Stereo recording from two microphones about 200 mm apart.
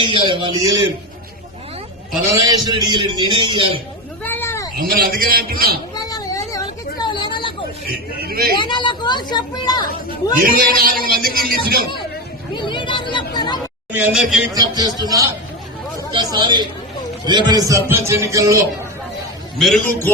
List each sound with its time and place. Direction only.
0.0 s a man's voice: 25° right (ahead or behind)
2.3 s a man's voice: 20° right (ahead or behind)
4.2 s cat: 10° left (ahead or behind)
4.8 s a man's voice: 45° right (ahead or behind)
5.9 s a sound: 20° left (ahead or behind)
8.2 s speech: 50° right (ahead or behind)
8.5 s a woman's voice: 25° left (ahead or behind)
10.8 s a man's voice: 45° right (ahead or behind)
12.5 s a sound: 25° left (ahead or behind)
13.9 s a man's voice: 5° right (ahead or behind)
14.5 s a man's voice: 20° right (ahead or behind)
16.1 s a man's voice: 20° right (ahead or behind)
19.5 s a man's voice: centre (ahead or behind)